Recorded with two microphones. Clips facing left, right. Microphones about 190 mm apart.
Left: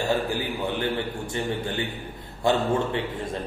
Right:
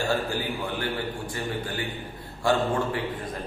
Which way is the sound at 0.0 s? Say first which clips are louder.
Left 2 dB; 20° left (ahead or behind).